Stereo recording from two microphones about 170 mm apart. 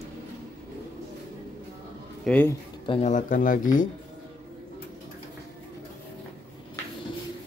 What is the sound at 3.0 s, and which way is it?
Speech, 45° left (ahead or behind).